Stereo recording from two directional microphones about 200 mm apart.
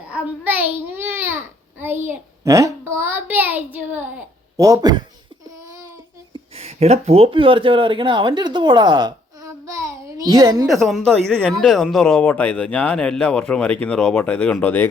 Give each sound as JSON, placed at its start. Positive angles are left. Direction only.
{"t": 0.1, "sound": "a child's voice", "side_deg": -10}
{"t": 6.3, "sound": "speech", "side_deg": -30}
{"t": 10.7, "sound": "speech", "side_deg": 0}